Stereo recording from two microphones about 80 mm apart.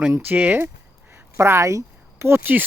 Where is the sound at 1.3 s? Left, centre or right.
Right.